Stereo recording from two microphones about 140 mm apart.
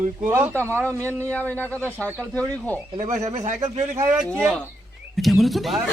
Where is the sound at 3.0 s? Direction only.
60° right (ahead or behind).